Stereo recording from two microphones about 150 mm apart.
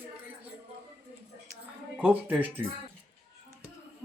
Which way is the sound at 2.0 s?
10° right (ahead or behind).